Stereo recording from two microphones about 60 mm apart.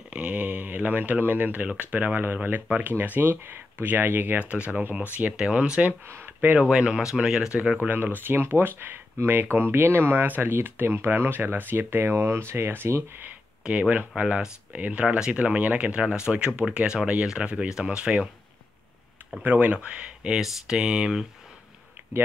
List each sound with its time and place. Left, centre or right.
0.1 s speech: right
4.4 s speech: right
6.1 s speech: right
6.8 s speech: centre
7.7 s speech: right
13.7 s speech: right
19.4 s speech: right
20.2 s speech: centre